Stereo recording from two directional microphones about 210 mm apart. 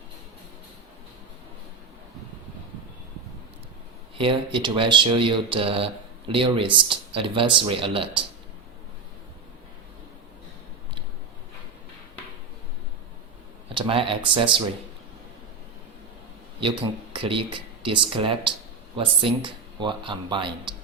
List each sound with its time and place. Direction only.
4.2 s speech: 25° right (ahead or behind)
13.7 s speech: 25° right (ahead or behind)
16.6 s speech: 25° right (ahead or behind)